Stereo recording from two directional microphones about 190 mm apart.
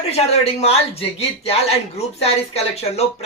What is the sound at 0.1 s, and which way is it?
Speech, 35° left (ahead or behind).